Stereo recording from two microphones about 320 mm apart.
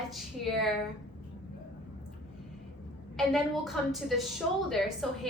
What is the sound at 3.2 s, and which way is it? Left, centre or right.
A woman's voice, centre.